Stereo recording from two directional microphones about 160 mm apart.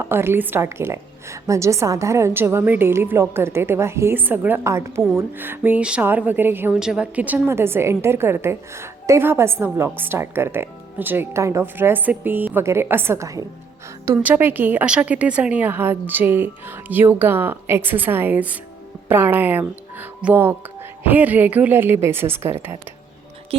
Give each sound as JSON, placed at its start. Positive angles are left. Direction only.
{"t": 0.0, "sound": "a woman's voice", "side_deg": -15}